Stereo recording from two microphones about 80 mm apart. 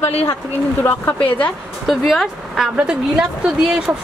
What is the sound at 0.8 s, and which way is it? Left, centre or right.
Speech, left.